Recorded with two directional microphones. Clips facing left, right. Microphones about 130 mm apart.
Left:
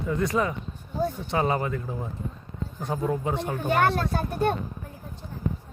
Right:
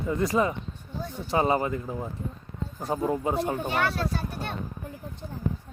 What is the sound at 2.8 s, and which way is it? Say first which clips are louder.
Speech: right 1 dB; 5° right (ahead or behind).